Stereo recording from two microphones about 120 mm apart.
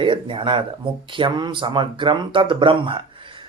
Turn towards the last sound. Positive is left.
turn(degrees=-45)  # may be behind; listen again after turning